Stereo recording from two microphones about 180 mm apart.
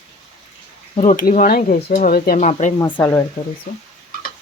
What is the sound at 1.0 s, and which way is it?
Speech, 45° left (ahead or behind).